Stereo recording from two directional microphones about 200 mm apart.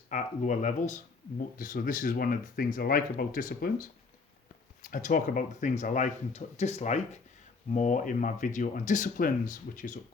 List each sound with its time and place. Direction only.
0.1 s speech: 40° left (ahead or behind)